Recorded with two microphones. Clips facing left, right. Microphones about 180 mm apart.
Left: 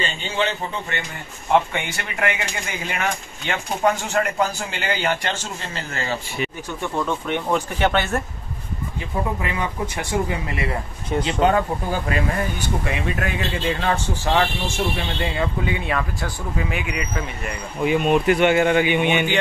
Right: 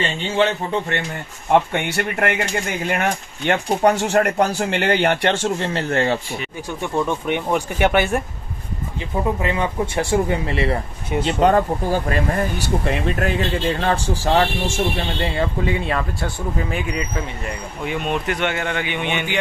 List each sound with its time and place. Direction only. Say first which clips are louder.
0.4 s speech: right 5 dB; 55° right (ahead or behind)
7.1 s speech: right 2 dB; 15° right (ahead or behind)
9.4 s speech: right 4 dB; 25° right (ahead or behind)
17.8 s a man's voice: left 6 dB; 5° left (ahead or behind)